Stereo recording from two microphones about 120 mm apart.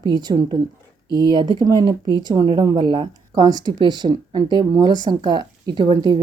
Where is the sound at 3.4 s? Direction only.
30° right (ahead or behind).